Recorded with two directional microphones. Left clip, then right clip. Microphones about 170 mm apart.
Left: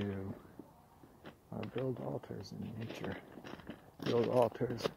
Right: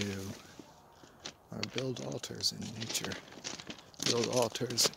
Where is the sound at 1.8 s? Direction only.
35° right (ahead or behind).